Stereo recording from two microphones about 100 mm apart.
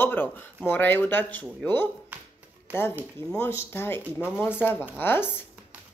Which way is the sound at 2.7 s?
20° right (ahead or behind).